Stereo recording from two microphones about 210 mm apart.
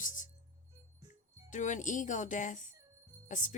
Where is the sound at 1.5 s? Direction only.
35° left (ahead or behind).